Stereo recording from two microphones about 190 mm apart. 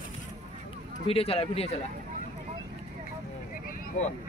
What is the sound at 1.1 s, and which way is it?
Speech, 30° left (ahead or behind).